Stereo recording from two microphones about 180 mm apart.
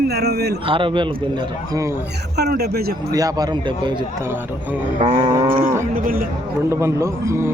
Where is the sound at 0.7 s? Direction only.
30° right (ahead or behind).